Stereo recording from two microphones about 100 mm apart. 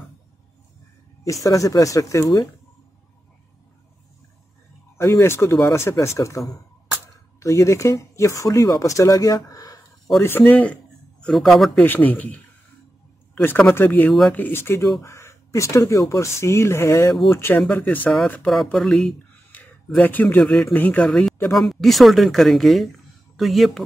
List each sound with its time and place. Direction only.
1.2 s speech: 35° left (ahead or behind)
4.9 s speech: 25° left (ahead or behind)
10.1 s a man's voice: 20° left (ahead or behind); by 11.8 s centre (ahead or behind)
11.8 s speech: 15° left (ahead or behind)
17.7 s speech: 15° left (ahead or behind)
18.5 s a sound: 5° left (ahead or behind)
20.0 s speech: 20° left (ahead or behind)
21.5 s speech: centre (ahead or behind)